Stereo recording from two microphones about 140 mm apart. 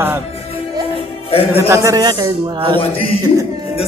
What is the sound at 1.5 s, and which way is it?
A man's voice, 20° right (ahead or behind).